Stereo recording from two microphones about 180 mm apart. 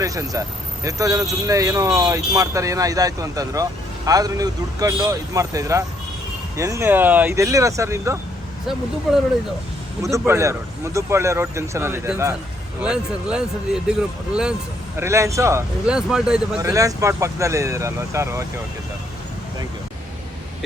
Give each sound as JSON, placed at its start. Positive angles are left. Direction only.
{"t": 0.0, "sound": "speech", "side_deg": -20}
{"t": 9.1, "sound": "speech", "side_deg": 0}
{"t": 10.0, "sound": "speech", "side_deg": -15}
{"t": 14.9, "sound": "speech", "side_deg": -15}
{"t": 15.9, "sound": "speech", "side_deg": -5}
{"t": 16.6, "sound": "speech", "side_deg": -20}